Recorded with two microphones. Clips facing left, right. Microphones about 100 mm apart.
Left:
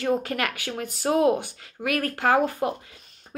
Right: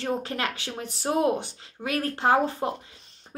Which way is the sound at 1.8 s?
25° right (ahead or behind).